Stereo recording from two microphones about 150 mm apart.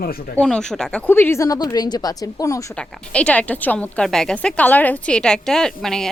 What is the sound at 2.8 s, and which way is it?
A woman's voice, 5° left (ahead or behind).